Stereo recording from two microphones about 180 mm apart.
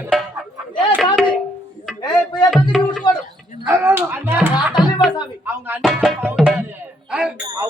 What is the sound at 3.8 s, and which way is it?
Speech, 15° right (ahead or behind).